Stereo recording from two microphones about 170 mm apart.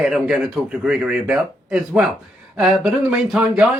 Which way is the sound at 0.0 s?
5° right (ahead or behind).